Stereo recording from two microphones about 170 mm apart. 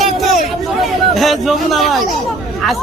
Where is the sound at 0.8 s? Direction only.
Centre (ahead or behind).